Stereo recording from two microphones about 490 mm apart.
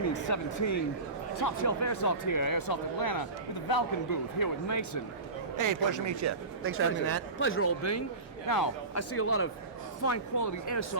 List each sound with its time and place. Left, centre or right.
0.3 s speech: left
5.5 s speech: right
7.3 s a man's voice: left
9.1 s a man's voice: left